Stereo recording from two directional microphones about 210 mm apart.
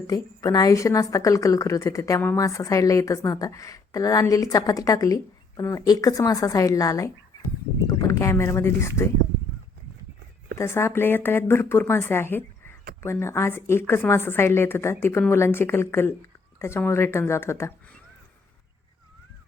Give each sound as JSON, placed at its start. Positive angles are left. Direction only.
{"t": 0.1, "sound": "a woman's voice", "side_deg": 15}
{"t": 10.6, "sound": "a woman's voice", "side_deg": 10}